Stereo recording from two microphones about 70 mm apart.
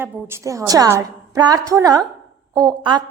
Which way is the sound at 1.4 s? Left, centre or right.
Right.